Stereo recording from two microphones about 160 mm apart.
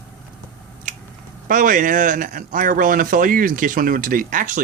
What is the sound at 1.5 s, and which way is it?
Speech, 55° right (ahead or behind).